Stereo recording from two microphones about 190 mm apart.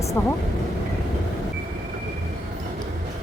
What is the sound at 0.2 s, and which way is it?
Speech, 15° left (ahead or behind).